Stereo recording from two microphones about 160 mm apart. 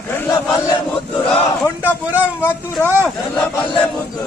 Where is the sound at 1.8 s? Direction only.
10° right (ahead or behind).